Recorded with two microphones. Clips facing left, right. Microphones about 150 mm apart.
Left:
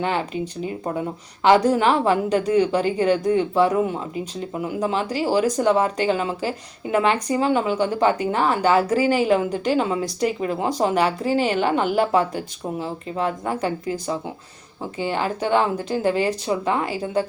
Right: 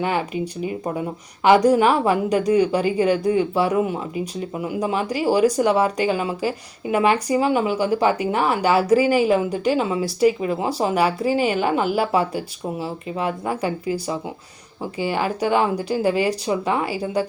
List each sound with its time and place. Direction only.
0.3 s speech: 10° right (ahead or behind)